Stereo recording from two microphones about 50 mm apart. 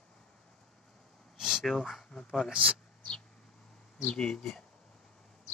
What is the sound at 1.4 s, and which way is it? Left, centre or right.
Speech, centre.